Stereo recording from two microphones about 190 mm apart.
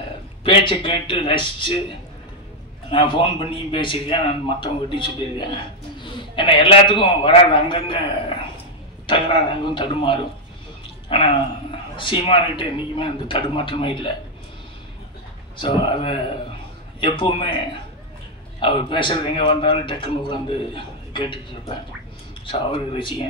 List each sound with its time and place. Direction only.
0.4 s a man's voice: 25° left (ahead or behind)
2.9 s a man's voice: 25° left (ahead or behind)
9.0 s a man's voice: 25° left (ahead or behind)
15.5 s a man's voice: 25° left (ahead or behind)
18.6 s a man's voice: 25° left (ahead or behind)